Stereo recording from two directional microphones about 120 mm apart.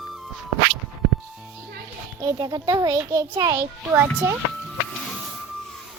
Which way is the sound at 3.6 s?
20° right (ahead or behind).